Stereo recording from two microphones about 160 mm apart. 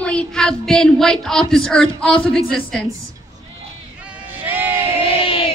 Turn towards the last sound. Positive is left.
turn(degrees=35)  # may be behind; listen again after turning